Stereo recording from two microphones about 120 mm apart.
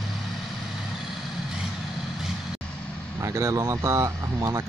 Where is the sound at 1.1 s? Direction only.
5° right (ahead or behind).